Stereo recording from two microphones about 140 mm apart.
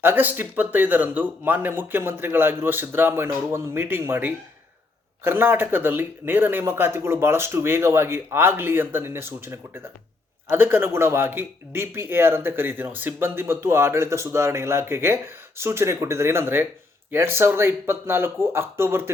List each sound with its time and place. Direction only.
0.0 s speech: 15° right (ahead or behind)